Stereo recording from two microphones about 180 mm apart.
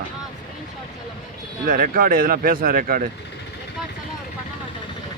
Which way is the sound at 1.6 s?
50° right (ahead or behind).